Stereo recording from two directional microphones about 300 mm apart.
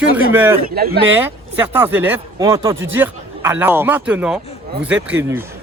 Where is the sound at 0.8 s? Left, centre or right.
Right.